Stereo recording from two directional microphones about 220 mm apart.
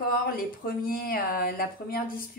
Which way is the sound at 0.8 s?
40° left (ahead or behind).